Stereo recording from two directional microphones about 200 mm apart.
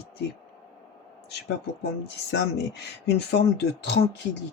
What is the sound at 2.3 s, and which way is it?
Speech, 55° left (ahead or behind).